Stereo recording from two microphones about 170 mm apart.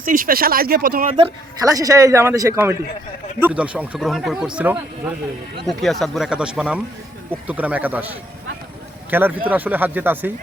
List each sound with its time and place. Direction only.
0.0 s speech: 55° right (ahead or behind)
1.6 s a man's voice: 20° right (ahead or behind)